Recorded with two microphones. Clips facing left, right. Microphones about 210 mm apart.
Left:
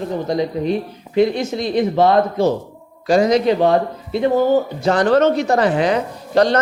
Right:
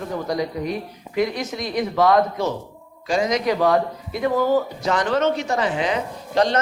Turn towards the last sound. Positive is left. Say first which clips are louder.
# left 5 dB
turn(degrees=35)  # may be behind; listen again after turning